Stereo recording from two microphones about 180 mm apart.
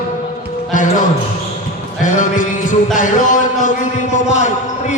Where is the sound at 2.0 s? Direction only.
45° left (ahead or behind).